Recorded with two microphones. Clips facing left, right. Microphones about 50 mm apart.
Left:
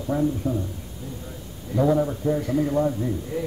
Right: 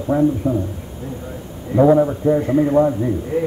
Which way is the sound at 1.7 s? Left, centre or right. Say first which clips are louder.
Right 8 dB; right.